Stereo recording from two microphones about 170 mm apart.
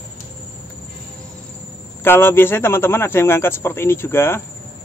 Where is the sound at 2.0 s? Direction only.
15° left (ahead or behind).